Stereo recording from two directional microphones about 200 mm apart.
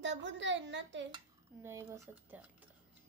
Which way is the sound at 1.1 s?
15° right (ahead or behind).